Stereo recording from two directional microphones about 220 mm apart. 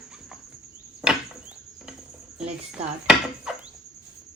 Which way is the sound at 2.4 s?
5° right (ahead or behind).